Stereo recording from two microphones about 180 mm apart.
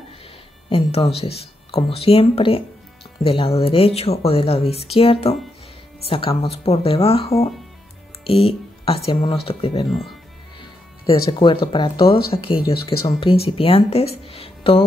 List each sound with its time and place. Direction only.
0.7 s speech: 35° left (ahead or behind)
9.8 s speech: centre (ahead or behind)
10.6 s speech: 30° left (ahead or behind)